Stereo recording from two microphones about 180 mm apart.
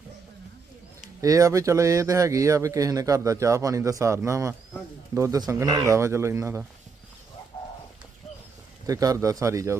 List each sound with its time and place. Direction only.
1.2 s speech: 20° right (ahead or behind)
8.9 s speech: 20° right (ahead or behind)